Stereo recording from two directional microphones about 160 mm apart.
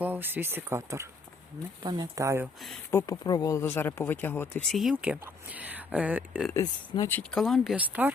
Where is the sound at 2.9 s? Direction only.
15° left (ahead or behind).